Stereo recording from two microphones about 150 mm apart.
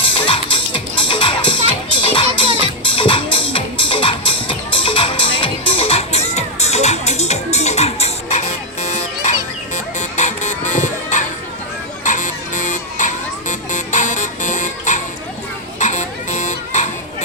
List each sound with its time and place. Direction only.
0.3 s music: 35° left (ahead or behind); by 15.0 s 55° left (ahead or behind)
15.8 s children playing: 50° left (ahead or behind)